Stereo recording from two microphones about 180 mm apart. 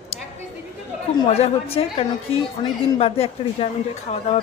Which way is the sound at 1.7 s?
30° left (ahead or behind).